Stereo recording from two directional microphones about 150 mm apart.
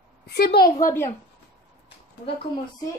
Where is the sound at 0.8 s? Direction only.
20° left (ahead or behind).